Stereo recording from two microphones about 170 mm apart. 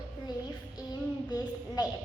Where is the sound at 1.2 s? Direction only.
25° left (ahead or behind).